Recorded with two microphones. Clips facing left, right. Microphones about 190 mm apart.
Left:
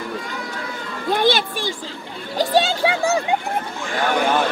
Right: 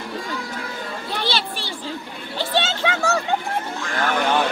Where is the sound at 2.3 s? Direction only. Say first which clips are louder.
Left 5 dB; 40° left (ahead or behind).